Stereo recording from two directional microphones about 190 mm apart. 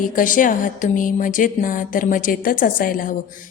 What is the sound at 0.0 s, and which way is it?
A woman's voice, 45° left (ahead or behind).